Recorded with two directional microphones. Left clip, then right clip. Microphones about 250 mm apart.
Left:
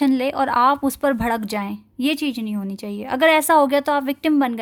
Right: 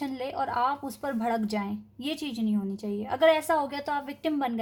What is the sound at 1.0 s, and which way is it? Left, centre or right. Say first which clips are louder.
Speech: left 8 dB; left.